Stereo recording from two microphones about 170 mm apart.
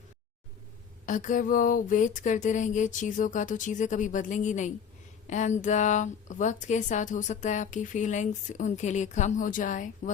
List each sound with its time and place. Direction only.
1.0 s speech: 50° left (ahead or behind)